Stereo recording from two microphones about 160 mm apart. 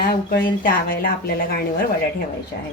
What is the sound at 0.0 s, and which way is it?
Speech, 65° left (ahead or behind).